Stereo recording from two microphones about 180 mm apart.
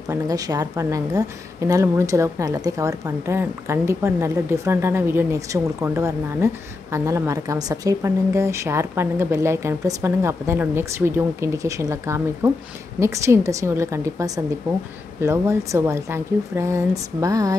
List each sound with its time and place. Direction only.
0.1 s a woman's voice: 20° right (ahead or behind)